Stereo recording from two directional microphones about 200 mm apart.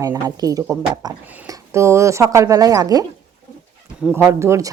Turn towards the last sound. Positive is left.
turn(degrees=-15)  # may be behind; listen again after turning